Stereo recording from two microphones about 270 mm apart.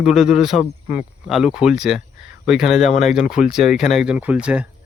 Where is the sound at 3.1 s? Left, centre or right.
Centre.